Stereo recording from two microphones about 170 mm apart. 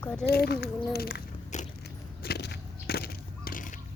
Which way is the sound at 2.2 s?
75° left (ahead or behind).